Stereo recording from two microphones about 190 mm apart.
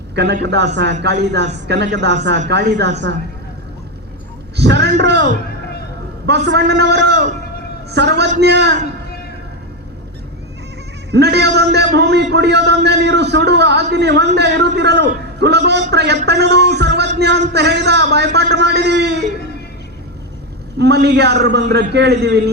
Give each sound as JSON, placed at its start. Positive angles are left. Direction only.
{"t": 0.4, "sound": "a man's voice", "side_deg": -65}
{"t": 4.5, "sound": "a man's voice", "side_deg": -65}
{"t": 11.1, "sound": "a man's voice", "side_deg": -60}
{"t": 20.7, "sound": "a man's voice", "side_deg": -60}